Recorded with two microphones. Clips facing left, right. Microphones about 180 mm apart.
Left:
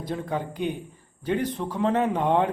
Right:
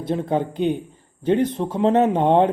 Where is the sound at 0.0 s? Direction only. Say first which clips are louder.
Right 7 dB; 25° right (ahead or behind).